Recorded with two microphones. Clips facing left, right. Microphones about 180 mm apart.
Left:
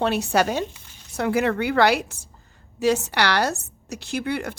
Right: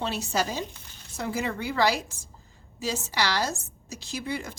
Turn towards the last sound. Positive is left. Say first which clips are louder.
# left 6 dB
turn(degrees=65)  # may be behind; listen again after turning